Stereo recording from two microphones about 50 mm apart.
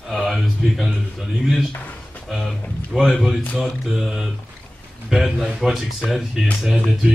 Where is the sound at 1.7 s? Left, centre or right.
Left.